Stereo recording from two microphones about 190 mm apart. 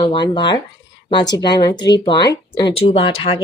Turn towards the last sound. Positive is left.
turn(degrees=30)  # may be behind; listen again after turning